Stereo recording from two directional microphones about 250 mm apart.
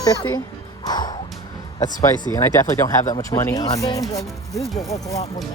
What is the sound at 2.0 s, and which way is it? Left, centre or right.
Speech, centre.